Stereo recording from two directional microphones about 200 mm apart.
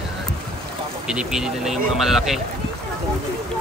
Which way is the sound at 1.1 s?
5° right (ahead or behind).